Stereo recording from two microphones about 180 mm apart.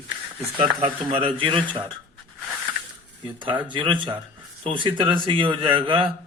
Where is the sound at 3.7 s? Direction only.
25° right (ahead or behind).